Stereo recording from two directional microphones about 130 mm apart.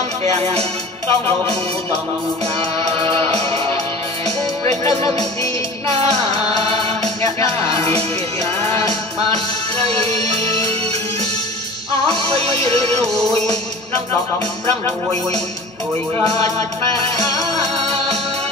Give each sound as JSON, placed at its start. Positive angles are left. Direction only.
{"t": 0.2, "sound": "music", "side_deg": -55}
{"t": 1.0, "sound": "music", "side_deg": 20}
{"t": 2.8, "sound": "music", "side_deg": -45}
{"t": 9.8, "sound": "music", "side_deg": -50}
{"t": 12.1, "sound": "music", "side_deg": -50}
{"t": 17.7, "sound": "music", "side_deg": -55}